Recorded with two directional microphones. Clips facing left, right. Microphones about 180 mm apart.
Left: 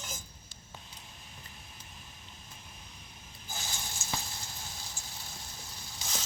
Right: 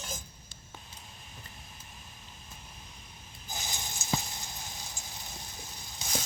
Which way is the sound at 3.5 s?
20° right (ahead or behind).